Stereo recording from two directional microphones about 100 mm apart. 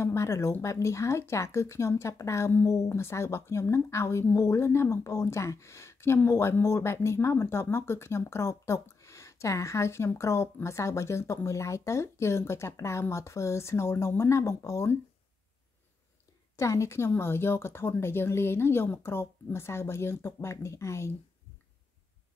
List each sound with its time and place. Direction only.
0.0 s speech: 30° left (ahead or behind)
16.5 s speech: 30° left (ahead or behind)